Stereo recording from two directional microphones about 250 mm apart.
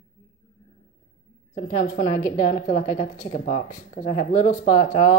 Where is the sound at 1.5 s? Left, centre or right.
Left.